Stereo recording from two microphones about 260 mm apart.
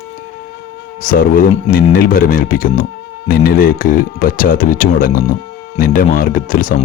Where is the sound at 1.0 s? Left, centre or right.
Left.